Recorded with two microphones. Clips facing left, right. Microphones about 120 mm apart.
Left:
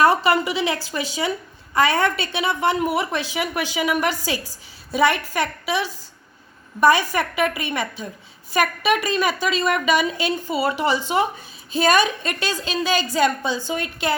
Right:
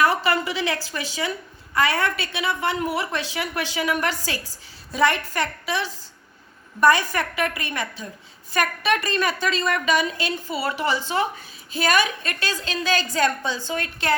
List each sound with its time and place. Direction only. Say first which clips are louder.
0.0 s a woman's voice: left 4 dB; 20° left (ahead or behind)